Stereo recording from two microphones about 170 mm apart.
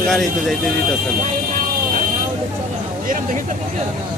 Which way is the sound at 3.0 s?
55° right (ahead or behind).